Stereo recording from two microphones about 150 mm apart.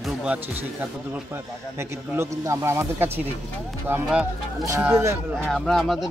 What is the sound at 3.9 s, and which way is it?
Speech, 5° right (ahead or behind).